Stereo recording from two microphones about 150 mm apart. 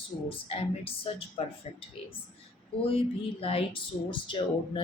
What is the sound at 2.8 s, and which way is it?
Speech, 40° left (ahead or behind).